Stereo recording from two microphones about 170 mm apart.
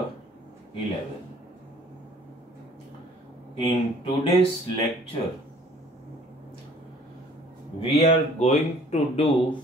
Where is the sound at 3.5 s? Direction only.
30° left (ahead or behind).